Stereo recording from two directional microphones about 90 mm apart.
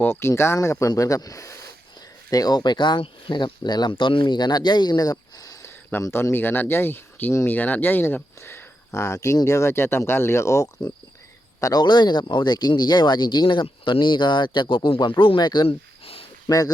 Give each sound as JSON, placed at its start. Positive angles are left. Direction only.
{"t": 0.0, "sound": "speech", "side_deg": 25}
{"t": 5.9, "sound": "speech", "side_deg": 30}
{"t": 11.6, "sound": "speech", "side_deg": 50}
{"t": 15.6, "sound": "a sound", "side_deg": 90}
{"t": 16.5, "sound": "speech", "side_deg": 45}